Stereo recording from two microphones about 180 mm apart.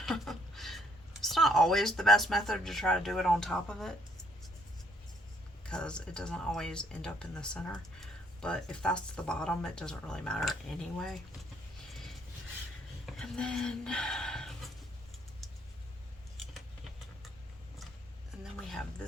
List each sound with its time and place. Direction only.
0.0 s speech: centre (ahead or behind)
5.6 s speech: 5° left (ahead or behind)
13.1 s a sound: 5° left (ahead or behind)